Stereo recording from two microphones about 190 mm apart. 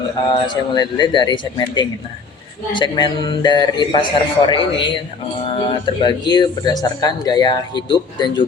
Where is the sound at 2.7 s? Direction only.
25° left (ahead or behind).